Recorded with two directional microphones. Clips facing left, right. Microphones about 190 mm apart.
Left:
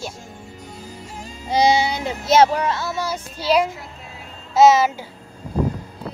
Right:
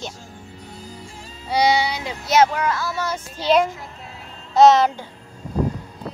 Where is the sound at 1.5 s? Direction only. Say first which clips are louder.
Left 2 dB; 25° left (ahead or behind).